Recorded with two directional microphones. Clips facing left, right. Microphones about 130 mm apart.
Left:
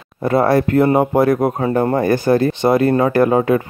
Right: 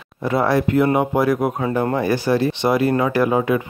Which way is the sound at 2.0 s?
50° left (ahead or behind).